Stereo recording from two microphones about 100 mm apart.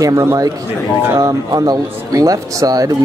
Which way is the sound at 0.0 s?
30° right (ahead or behind).